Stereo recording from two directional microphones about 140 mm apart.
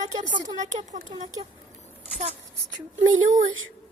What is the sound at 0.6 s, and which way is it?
Speech, 60° right (ahead or behind).